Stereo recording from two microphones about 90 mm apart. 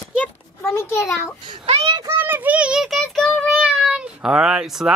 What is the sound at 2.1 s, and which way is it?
A child's voice, 25° right (ahead or behind).